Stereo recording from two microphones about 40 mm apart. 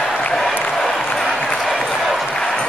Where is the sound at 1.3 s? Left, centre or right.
Centre.